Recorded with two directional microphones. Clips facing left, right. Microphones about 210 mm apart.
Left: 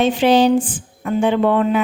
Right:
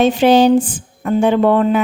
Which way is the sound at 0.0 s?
45° right (ahead or behind).